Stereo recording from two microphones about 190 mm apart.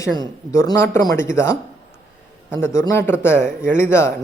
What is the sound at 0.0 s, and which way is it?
Speech, 15° left (ahead or behind).